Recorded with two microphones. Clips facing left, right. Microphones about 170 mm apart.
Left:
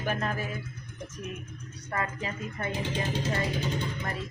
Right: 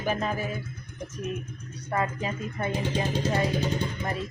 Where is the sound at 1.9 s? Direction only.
25° right (ahead or behind).